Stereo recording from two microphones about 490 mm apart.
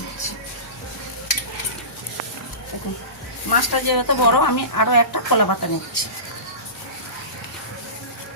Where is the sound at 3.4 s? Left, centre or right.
Left.